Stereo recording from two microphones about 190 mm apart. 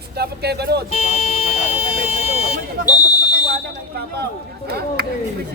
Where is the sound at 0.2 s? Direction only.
60° right (ahead or behind).